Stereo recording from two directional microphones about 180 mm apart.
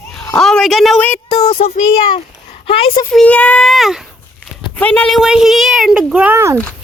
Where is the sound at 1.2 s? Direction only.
25° left (ahead or behind).